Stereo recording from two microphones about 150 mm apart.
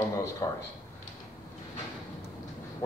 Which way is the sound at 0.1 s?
20° left (ahead or behind).